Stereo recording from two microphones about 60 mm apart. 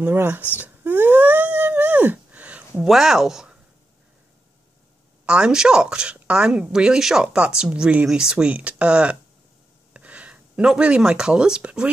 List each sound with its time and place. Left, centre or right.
0.0 s speech: right
0.6 s a sound: right
2.8 s a woman's voice: centre
5.2 s a woman's voice: centre